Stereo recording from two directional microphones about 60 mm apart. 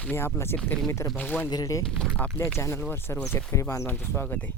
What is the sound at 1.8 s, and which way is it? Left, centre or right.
Speech, centre.